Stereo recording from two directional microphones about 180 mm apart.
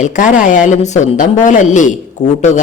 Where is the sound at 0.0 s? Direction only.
45° left (ahead or behind).